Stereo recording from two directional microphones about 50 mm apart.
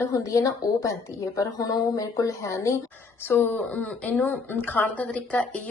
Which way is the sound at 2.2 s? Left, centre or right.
Left.